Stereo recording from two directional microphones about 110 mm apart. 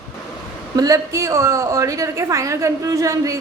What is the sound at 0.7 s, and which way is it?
A woman's voice, 30° right (ahead or behind).